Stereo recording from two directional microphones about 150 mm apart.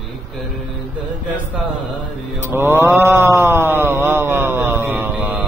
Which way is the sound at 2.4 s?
15° right (ahead or behind).